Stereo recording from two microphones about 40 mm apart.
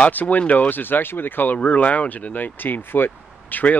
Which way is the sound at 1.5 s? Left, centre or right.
Left.